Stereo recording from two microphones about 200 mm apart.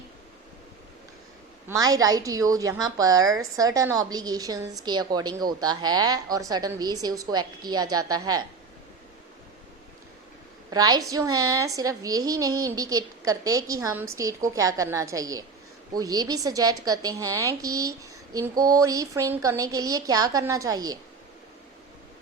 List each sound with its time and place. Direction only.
1.6 s a woman's voice: 15° right (ahead or behind)
10.7 s a woman's voice: 20° right (ahead or behind)